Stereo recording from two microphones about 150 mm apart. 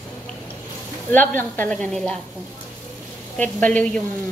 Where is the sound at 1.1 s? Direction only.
10° left (ahead or behind).